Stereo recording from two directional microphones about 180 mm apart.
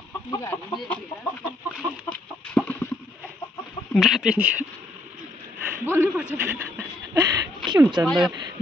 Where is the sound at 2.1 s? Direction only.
10° left (ahead or behind).